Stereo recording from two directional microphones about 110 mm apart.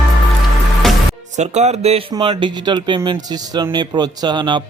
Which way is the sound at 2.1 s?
45° right (ahead or behind).